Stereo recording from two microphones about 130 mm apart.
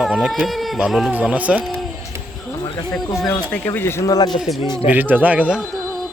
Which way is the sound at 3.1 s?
25° left (ahead or behind).